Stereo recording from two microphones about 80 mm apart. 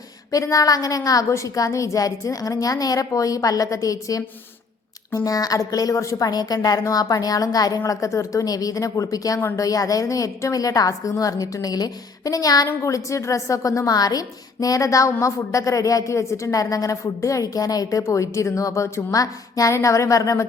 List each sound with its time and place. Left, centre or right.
0.3 s a woman's voice: left
18.0 s a woman's voice: left